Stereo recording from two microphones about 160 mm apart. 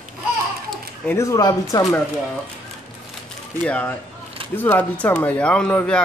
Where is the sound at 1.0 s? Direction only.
15° left (ahead or behind).